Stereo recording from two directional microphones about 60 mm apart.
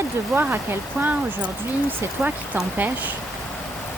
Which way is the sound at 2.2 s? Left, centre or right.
Centre.